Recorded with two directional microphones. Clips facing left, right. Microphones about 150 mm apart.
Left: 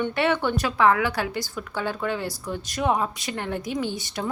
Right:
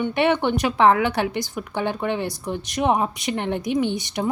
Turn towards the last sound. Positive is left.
turn(degrees=-20)  # may be behind; listen again after turning